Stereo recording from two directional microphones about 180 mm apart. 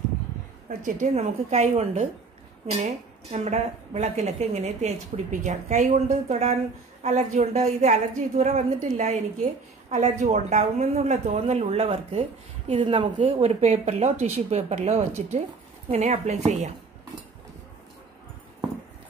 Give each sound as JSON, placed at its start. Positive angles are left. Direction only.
{"t": 0.7, "sound": "a woman's voice", "side_deg": -45}